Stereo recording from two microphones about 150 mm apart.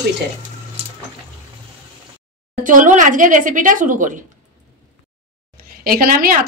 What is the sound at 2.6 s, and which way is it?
Speech, 60° right (ahead or behind).